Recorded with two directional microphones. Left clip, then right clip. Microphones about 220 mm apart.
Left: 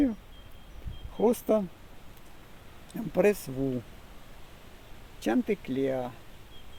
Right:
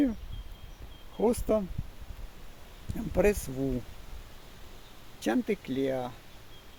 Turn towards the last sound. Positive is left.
turn(degrees=0)  # may be behind; listen again after turning